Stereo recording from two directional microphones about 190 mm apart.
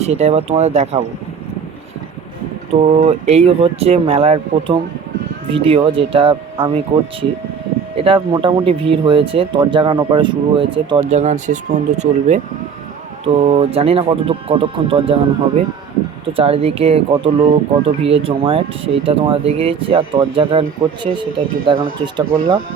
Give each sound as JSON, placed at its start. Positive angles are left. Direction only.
{"t": 0.0, "sound": "speech", "side_deg": -35}
{"t": 2.8, "sound": "speech", "side_deg": -35}
{"t": 16.3, "sound": "speech", "side_deg": -30}